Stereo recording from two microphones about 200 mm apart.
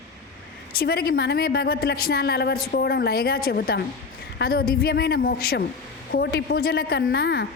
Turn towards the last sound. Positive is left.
turn(degrees=55)  # may be behind; listen again after turning